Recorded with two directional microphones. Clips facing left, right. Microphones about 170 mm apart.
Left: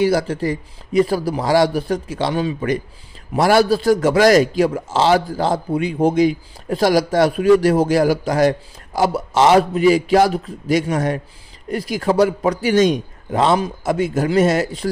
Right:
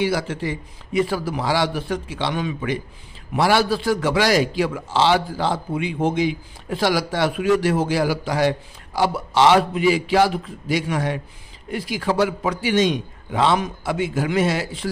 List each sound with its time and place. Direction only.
0.0 s a man's voice: 40° left (ahead or behind)